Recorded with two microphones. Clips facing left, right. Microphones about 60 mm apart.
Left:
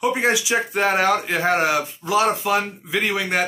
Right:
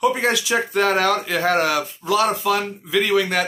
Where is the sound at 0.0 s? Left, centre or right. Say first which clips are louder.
Right 1 dB; centre.